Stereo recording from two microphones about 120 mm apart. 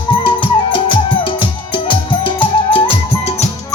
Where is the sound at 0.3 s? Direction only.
45° left (ahead or behind).